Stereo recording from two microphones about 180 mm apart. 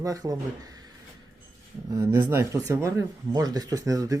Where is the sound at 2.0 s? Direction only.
15° right (ahead or behind).